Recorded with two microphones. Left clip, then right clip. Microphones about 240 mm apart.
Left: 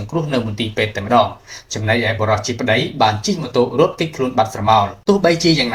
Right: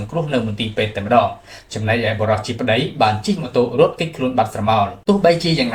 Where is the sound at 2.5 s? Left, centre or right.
Left.